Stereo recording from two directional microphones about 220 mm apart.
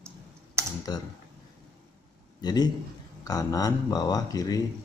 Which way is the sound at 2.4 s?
20° left (ahead or behind).